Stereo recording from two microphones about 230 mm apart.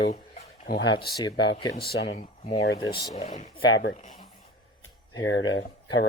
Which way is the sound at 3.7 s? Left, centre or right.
Left.